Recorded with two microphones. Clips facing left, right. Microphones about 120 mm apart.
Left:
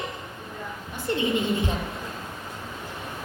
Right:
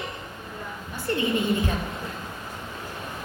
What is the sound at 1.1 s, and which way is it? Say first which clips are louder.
Speech: even; 20° left (ahead or behind).